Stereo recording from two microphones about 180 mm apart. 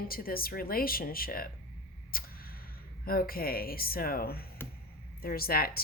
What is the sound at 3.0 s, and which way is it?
Speech, 55° left (ahead or behind).